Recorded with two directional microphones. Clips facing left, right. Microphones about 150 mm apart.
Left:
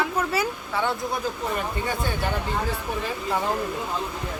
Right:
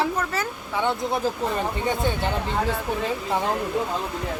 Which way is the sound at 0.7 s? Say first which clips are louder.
Right 3 dB; 20° right (ahead or behind).